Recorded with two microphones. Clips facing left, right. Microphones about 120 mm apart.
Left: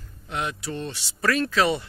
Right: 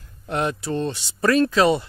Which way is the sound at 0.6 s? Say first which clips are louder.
Right 7 dB; 35° right (ahead or behind).